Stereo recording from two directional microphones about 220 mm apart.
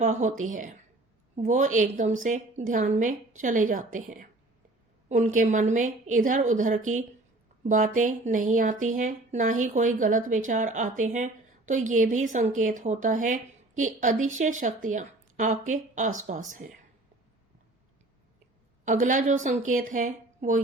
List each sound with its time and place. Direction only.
0.0 s speech: 35° right (ahead or behind)
18.9 s speech: 35° right (ahead or behind)